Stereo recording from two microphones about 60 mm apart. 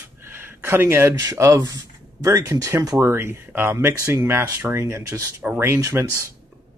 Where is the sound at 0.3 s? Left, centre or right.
Right.